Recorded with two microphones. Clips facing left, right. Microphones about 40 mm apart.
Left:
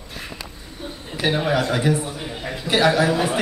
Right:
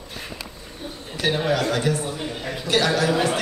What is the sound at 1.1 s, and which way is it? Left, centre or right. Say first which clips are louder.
A man's voice: left 2 dB; centre.